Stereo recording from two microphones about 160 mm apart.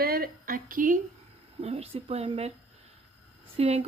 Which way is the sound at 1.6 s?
40° right (ahead or behind).